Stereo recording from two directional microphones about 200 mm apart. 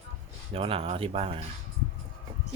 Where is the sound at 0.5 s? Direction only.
30° right (ahead or behind).